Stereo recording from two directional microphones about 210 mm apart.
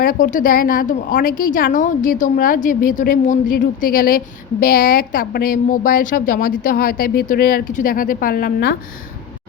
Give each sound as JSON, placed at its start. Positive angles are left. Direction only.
{"t": 0.0, "sound": "a woman's voice", "side_deg": 40}